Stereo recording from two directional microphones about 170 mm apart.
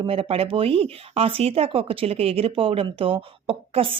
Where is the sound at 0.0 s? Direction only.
35° right (ahead or behind).